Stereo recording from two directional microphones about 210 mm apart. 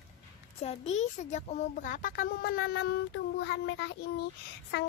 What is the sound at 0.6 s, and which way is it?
A child's voice, 30° left (ahead or behind).